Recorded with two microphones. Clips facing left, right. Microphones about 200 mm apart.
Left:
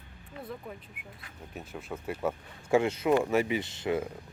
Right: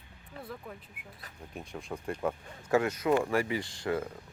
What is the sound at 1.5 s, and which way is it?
Speech, 5° left (ahead or behind).